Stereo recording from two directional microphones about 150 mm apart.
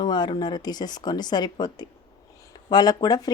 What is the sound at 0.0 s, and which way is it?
Speech, 30° left (ahead or behind).